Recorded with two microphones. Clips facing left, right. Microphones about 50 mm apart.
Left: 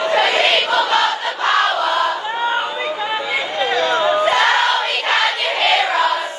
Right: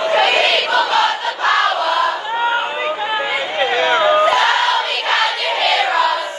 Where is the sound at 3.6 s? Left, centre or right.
Right.